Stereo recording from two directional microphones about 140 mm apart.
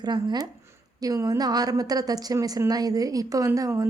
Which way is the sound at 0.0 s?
30° right (ahead or behind).